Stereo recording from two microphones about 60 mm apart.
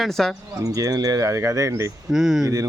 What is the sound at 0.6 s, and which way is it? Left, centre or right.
Speech, right.